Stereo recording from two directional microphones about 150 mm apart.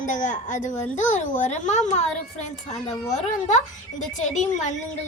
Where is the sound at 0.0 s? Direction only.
55° left (ahead or behind).